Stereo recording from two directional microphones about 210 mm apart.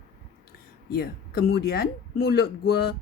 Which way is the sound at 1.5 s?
50° left (ahead or behind).